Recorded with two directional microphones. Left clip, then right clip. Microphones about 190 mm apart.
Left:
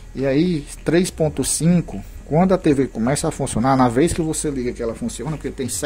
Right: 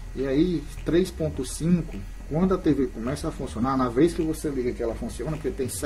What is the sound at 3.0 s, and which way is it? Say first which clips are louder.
Speech: left 9 dB; 50° left (ahead or behind).